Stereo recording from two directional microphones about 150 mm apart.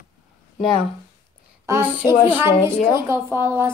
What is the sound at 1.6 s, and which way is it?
Speech, 15° right (ahead or behind).